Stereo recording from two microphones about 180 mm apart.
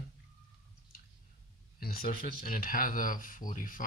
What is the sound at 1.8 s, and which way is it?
Speech, 55° left (ahead or behind).